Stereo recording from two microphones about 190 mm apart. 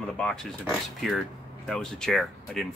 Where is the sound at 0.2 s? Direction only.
5° left (ahead or behind).